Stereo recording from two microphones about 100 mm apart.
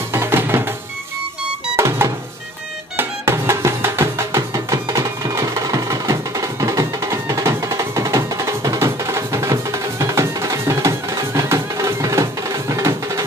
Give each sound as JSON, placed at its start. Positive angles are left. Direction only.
{"t": 0.1, "sound": "music", "side_deg": -25}
{"t": 1.8, "sound": "music", "side_deg": -25}